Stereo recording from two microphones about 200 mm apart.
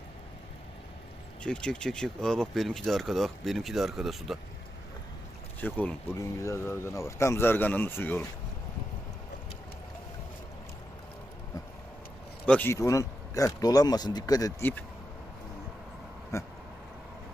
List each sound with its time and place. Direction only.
1.5 s speech: 5° left (ahead or behind)
5.5 s speech: 10° left (ahead or behind)
12.5 s speech: 10° left (ahead or behind)
16.3 s speech: 15° left (ahead or behind)